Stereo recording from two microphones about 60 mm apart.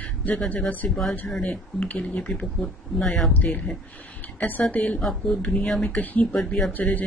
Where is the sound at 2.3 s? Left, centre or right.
Centre.